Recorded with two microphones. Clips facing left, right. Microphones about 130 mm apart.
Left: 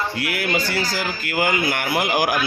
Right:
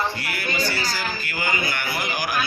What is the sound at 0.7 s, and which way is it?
Speech, 90° left.